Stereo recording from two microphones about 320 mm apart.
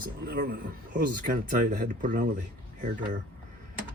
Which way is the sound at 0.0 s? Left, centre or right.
Right.